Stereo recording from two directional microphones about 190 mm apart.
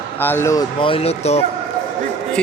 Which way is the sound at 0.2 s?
10° left (ahead or behind).